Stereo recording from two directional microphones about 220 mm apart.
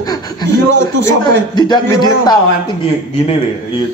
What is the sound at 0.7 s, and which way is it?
Speech, 55° right (ahead or behind).